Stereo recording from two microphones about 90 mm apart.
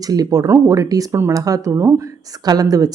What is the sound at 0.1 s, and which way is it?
A woman's voice, 45° right (ahead or behind).